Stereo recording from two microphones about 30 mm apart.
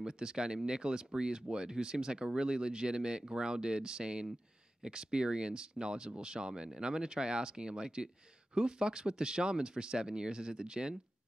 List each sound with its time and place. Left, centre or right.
0.0 s speech: right